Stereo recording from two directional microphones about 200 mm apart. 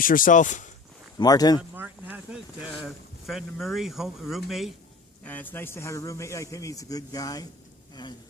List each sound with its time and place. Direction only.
0.0 s speech: 45° left (ahead or behind)
1.2 s speech: 20° left (ahead or behind)
1.7 s a man's voice: 10° right (ahead or behind); by 8.1 s 20° left (ahead or behind)